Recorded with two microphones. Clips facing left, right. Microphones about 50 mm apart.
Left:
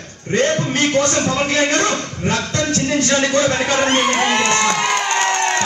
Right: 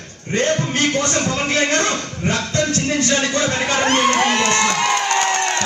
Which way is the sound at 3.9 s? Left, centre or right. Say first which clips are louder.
Even; left.